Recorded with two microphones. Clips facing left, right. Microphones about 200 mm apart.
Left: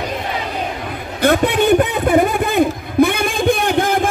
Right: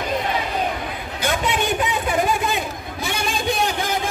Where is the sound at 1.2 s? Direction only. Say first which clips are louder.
Left 9 dB; 60° left (ahead or behind).